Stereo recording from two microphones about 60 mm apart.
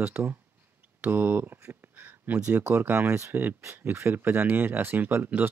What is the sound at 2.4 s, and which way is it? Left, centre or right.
Speech, right.